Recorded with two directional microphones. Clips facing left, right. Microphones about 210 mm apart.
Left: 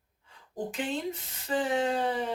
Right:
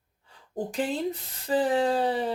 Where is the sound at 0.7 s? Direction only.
40° right (ahead or behind).